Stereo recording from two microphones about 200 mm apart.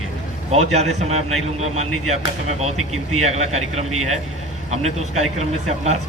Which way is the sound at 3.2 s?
35° right (ahead or behind).